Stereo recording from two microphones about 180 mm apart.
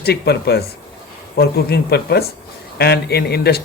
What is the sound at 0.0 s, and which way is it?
Speech, 65° left (ahead or behind).